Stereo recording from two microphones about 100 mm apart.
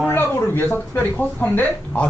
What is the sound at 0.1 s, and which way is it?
Speech, 20° left (ahead or behind).